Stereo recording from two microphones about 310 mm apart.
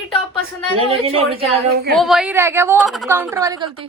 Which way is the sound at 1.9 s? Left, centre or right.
Centre.